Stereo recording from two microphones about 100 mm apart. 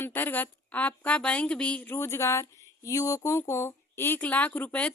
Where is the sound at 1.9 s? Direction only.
25° left (ahead or behind).